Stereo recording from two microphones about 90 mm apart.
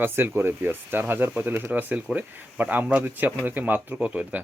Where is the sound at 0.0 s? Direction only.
25° right (ahead or behind).